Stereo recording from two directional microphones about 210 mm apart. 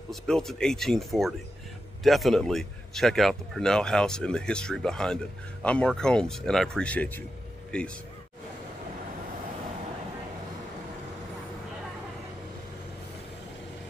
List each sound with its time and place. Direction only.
0.1 s speech: centre (ahead or behind)